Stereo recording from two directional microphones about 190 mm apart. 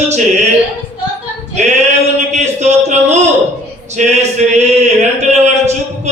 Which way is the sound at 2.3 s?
35° right (ahead or behind).